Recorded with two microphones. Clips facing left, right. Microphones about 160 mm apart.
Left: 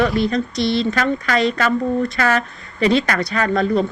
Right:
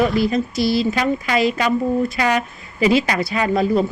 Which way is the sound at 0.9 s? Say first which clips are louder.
Even; 15° right (ahead or behind).